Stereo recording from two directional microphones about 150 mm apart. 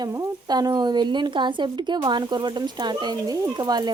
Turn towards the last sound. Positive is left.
turn(degrees=-25)  # may be behind; listen again after turning